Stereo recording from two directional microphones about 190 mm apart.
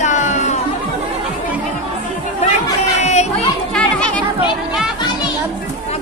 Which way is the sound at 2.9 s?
35° left (ahead or behind).